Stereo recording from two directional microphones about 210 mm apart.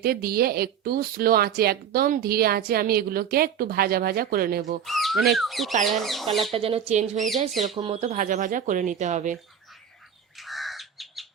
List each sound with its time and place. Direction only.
0.0 s a woman's voice: 45° right (ahead or behind)
4.9 s speech: centre (ahead or behind)
6.5 s speech: 25° right (ahead or behind)
10.3 s crow: centre (ahead or behind)